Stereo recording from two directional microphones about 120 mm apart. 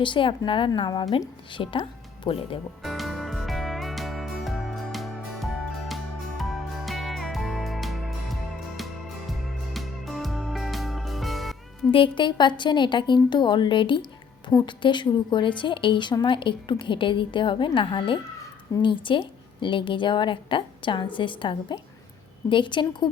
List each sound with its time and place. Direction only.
0.0 s a woman's voice: 45° left (ahead or behind)
2.8 s music: centre (ahead or behind)
11.9 s a woman's voice: 45° left (ahead or behind)